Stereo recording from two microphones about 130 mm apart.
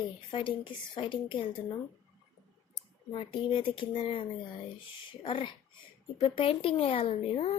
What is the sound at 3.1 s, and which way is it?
Speech, 40° left (ahead or behind).